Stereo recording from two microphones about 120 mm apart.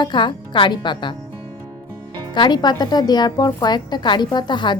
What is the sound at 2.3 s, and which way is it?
Speech, 40° left (ahead or behind).